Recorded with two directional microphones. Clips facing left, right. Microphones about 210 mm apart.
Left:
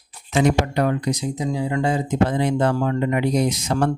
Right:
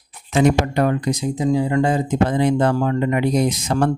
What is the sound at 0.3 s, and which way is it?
Speech, 50° right (ahead or behind).